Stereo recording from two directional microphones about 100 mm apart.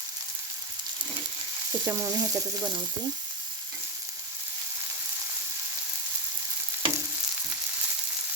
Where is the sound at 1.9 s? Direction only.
30° right (ahead or behind).